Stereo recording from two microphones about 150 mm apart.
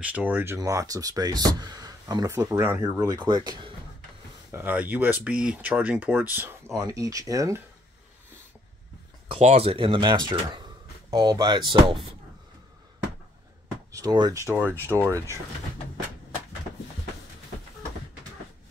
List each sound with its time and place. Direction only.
0.0 s speech: 10° right (ahead or behind)
3.1 s speech: 30° right (ahead or behind)
4.5 s speech: 15° right (ahead or behind)
9.3 s speech: 45° right (ahead or behind)
13.9 s speech: 25° right (ahead or behind)